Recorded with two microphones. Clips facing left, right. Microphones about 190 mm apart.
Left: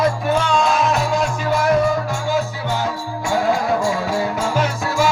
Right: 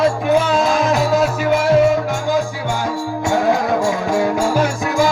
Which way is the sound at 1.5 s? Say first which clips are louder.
Right 1 dB; 25° right (ahead or behind).